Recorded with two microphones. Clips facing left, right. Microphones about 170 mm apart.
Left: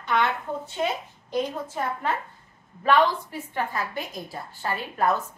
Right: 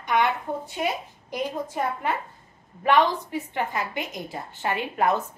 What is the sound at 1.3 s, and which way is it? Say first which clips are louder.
A woman's voice: left 1 dB; 10° right (ahead or behind).